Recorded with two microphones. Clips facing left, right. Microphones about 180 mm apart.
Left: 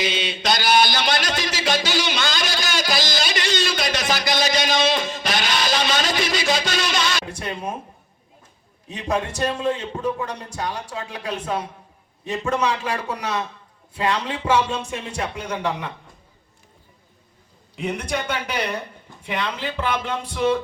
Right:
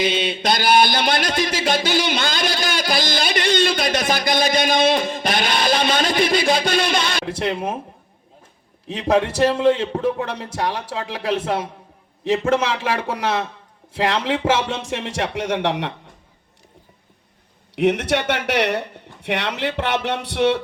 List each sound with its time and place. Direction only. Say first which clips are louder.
0.0 s a sound: right 4 dB; 55° right (ahead or behind)
7.3 s a man's voice: right 6 dB; 80° right
8.9 s a man's voice: right 6 dB; 80° right
17.7 s speech: right 8 dB; 80° right